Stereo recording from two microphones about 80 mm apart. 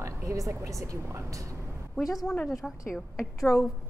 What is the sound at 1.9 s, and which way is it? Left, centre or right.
Speech, centre.